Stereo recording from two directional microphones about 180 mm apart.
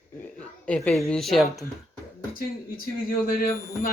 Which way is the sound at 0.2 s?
5° left (ahead or behind).